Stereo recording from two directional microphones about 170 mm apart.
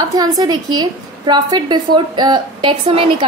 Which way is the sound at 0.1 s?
20° right (ahead or behind).